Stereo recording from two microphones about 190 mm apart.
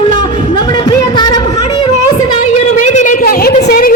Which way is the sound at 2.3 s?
40° left (ahead or behind).